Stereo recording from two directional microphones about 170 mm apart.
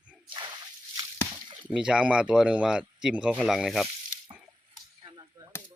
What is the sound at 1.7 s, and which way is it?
Speech, 5° right (ahead or behind).